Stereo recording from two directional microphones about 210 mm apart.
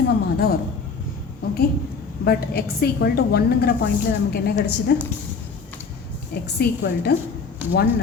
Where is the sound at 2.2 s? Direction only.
50° left (ahead or behind).